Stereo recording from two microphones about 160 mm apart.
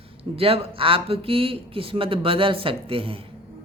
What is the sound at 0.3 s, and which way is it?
Speech, 35° right (ahead or behind).